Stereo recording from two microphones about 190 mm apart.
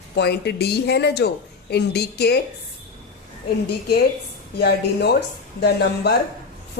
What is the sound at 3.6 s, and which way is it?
A woman's voice, 60° left (ahead or behind).